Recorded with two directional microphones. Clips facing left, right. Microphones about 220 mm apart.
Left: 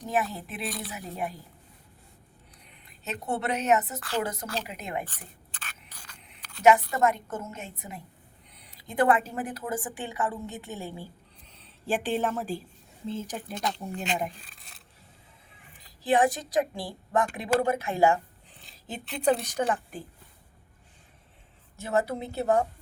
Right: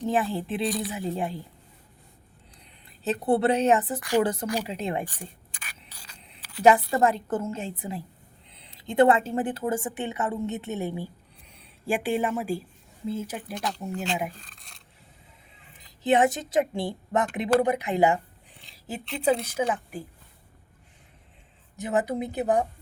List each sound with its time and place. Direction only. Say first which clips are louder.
0.0 s a woman's voice: right 4 dB; 30° right (ahead or behind)
0.6 s speech: right 6 dB; centre (ahead or behind)
0.9 s a woman's voice: right 5 dB; 30° right (ahead or behind)
2.8 s a woman's voice: right 9 dB; 35° right (ahead or behind)
5.0 s a sound: right 7 dB; 10° right (ahead or behind)
6.6 s a woman's voice: right 2 dB; 30° right (ahead or behind); by 13.4 s 10° right (ahead or behind)
14.4 s a sound: right 1 dB; 5° left (ahead or behind)
15.8 s a woman's voice: right 2 dB; 20° right (ahead or behind)
19.1 s a woman's voice: right 1 dB; 5° right (ahead or behind)
21.8 s a woman's voice: right 2 dB; 15° right (ahead or behind)